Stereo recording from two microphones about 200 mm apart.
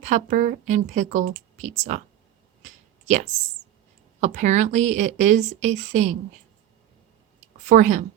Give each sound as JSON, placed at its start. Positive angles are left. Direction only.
{"t": 0.0, "sound": "a woman's voice", "side_deg": -40}
{"t": 4.2, "sound": "a woman's voice", "side_deg": -35}
{"t": 7.7, "sound": "a woman's voice", "side_deg": -40}